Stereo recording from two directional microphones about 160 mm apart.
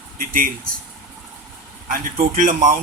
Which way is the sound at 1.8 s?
55° right (ahead or behind).